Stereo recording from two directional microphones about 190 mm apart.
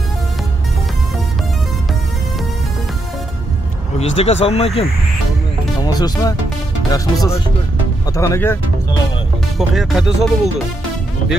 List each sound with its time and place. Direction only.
4.0 s speech: 30° left (ahead or behind)
5.8 s speech: 20° left (ahead or behind)
9.6 s speech: centre (ahead or behind)